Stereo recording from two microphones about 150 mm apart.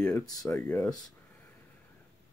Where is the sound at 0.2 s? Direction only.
25° left (ahead or behind).